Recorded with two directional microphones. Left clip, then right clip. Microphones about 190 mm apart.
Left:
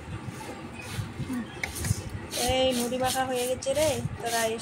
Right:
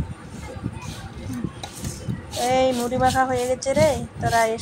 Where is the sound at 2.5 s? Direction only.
20° right (ahead or behind).